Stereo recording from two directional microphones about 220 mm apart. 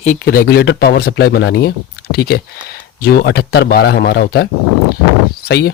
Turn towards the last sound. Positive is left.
turn(degrees=45)  # may be behind; listen again after turning